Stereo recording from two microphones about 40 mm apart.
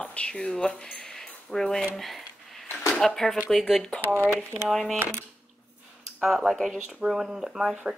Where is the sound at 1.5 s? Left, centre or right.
Centre.